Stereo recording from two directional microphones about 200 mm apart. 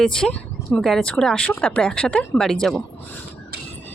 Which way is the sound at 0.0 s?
5° left (ahead or behind).